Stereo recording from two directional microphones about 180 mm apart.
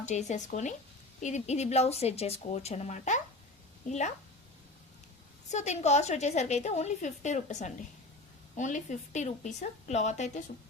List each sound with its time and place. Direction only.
0.0 s a woman's voice: 40° left (ahead or behind)
5.5 s a woman's voice: 40° left (ahead or behind)